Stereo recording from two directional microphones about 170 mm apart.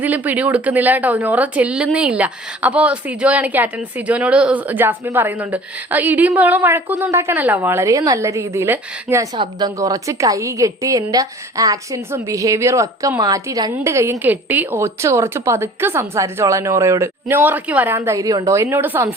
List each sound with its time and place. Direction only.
0.0 s a woman's voice: 10° right (ahead or behind)
9.3 s a woman's voice: 25° right (ahead or behind)